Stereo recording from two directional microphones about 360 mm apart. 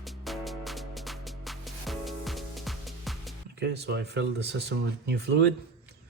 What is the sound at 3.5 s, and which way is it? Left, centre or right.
Speech, right.